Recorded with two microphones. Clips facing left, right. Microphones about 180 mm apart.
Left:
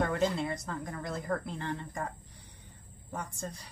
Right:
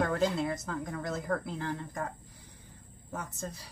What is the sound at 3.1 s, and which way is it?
Speech, 5° right (ahead or behind).